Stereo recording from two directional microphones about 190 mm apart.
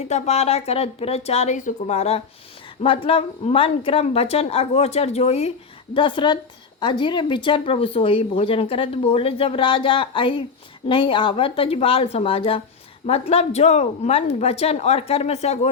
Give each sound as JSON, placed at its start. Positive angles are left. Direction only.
{"t": 0.0, "sound": "a woman's voice", "side_deg": 35}